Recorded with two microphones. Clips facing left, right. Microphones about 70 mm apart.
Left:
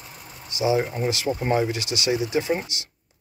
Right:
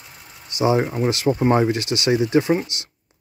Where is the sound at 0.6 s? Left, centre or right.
Right.